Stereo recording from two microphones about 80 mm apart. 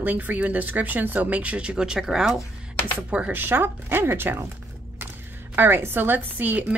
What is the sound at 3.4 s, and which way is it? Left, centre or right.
A woman's voice, right.